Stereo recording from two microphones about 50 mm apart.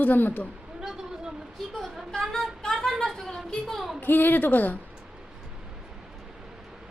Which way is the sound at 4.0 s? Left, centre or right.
Left.